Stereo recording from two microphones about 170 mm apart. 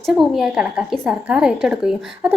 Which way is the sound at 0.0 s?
Centre (ahead or behind).